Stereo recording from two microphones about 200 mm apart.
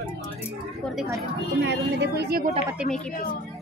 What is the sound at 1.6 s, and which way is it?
Speech, 60° right (ahead or behind).